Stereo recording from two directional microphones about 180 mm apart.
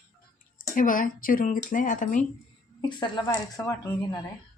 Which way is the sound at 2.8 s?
25° left (ahead or behind).